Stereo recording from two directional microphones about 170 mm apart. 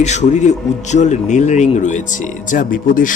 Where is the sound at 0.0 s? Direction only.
40° left (ahead or behind).